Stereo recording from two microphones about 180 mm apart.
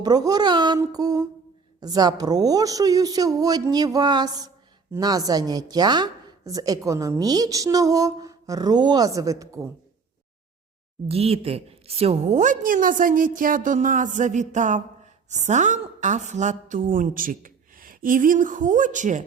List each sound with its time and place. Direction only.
0.0 s a woman's voice: 20° right (ahead or behind)
11.1 s a woman's voice: 35° right (ahead or behind)